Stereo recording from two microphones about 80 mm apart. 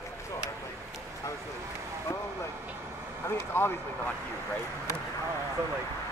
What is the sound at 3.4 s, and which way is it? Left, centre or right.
Speech, left.